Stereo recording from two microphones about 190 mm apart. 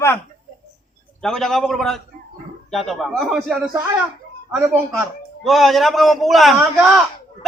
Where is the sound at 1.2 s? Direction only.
Centre (ahead or behind).